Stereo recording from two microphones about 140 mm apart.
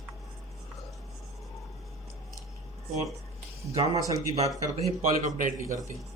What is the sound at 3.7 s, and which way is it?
Speech, 50° right (ahead or behind).